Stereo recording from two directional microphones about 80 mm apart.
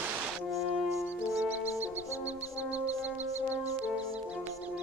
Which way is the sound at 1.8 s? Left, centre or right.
Centre.